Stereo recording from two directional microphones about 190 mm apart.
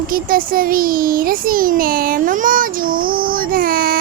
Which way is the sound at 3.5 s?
50° right (ahead or behind).